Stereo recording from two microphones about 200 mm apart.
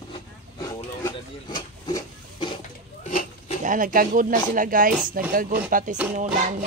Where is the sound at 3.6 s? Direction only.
40° right (ahead or behind).